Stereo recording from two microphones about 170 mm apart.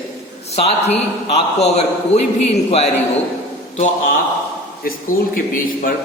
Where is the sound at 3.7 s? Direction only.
45° left (ahead or behind).